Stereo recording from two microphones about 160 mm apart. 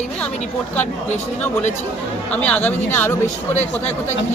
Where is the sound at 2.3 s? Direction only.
10° left (ahead or behind).